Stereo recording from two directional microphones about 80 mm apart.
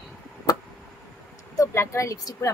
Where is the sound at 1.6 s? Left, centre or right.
Left.